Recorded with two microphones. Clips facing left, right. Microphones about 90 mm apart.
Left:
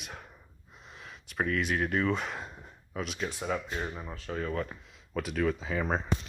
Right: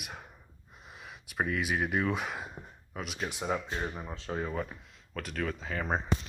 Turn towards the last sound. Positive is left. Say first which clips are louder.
# left 2 dB
turn(degrees=-5)  # may be behind; listen again after turning